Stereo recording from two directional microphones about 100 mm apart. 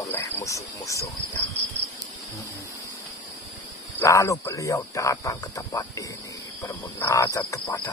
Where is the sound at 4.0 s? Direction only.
30° left (ahead or behind).